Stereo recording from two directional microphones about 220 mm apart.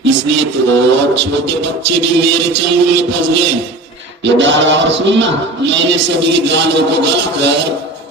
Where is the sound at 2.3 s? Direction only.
50° right (ahead or behind).